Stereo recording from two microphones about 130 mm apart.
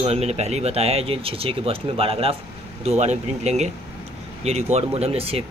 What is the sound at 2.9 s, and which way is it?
Speech, 60° right (ahead or behind).